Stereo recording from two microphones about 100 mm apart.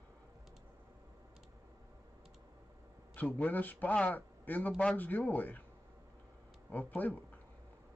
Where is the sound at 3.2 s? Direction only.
15° left (ahead or behind).